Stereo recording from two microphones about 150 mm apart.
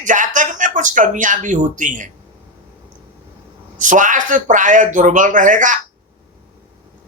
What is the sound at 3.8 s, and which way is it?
Speech, 60° right (ahead or behind).